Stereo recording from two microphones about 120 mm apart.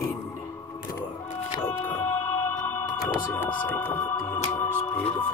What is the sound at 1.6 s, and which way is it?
Music, 20° left (ahead or behind).